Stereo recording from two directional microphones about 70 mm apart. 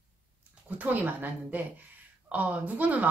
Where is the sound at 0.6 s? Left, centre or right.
Right.